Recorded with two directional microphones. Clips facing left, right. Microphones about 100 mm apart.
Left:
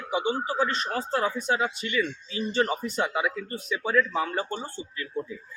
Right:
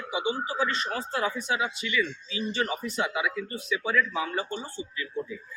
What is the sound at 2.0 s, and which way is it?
Speech, 30° left (ahead or behind).